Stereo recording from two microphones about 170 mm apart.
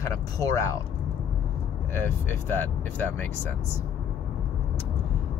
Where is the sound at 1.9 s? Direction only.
10° left (ahead or behind).